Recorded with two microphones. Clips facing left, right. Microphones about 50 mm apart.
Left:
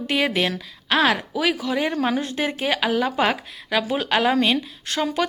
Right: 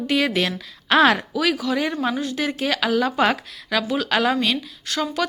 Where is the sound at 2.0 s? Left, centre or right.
Left.